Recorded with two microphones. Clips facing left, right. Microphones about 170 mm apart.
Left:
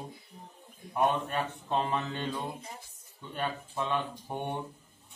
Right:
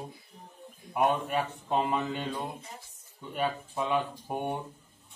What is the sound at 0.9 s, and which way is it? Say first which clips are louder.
Speech: right 2 dB; 10° right (ahead or behind).